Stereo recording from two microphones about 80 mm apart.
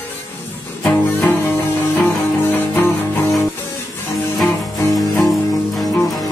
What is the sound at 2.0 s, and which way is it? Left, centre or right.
Music, left.